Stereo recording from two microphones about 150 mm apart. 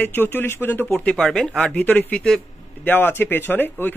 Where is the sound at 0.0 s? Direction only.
15° left (ahead or behind).